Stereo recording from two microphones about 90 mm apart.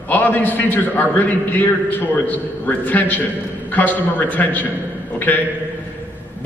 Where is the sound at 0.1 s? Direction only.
20° left (ahead or behind).